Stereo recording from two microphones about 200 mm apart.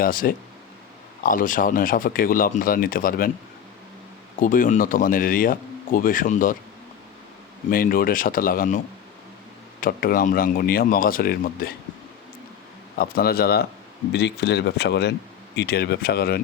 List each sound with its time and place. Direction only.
0.0 s speech: 45° left (ahead or behind)
4.4 s speech: 45° left (ahead or behind)
7.7 s speech: 45° left (ahead or behind)
9.8 s speech: 45° left (ahead or behind)
13.0 s speech: 50° left (ahead or behind)